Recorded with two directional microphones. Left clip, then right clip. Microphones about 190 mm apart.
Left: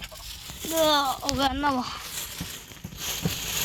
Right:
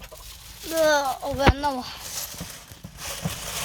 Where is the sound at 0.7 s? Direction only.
10° right (ahead or behind).